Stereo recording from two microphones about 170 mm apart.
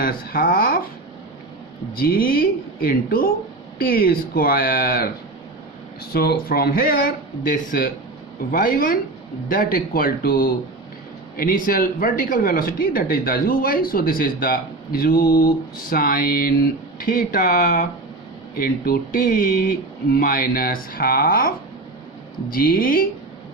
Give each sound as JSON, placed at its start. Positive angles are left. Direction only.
{"t": 0.0, "sound": "speech", "side_deg": 55}
{"t": 2.0, "sound": "speech", "side_deg": 60}
{"t": 6.1, "sound": "speech", "side_deg": 65}